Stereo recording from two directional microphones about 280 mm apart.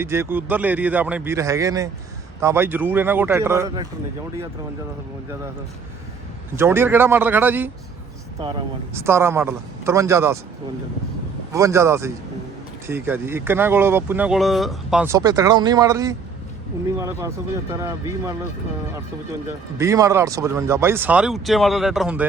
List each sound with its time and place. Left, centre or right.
0.0 s speech: centre
6.6 s speech: centre
11.5 s speech: centre
19.8 s speech: centre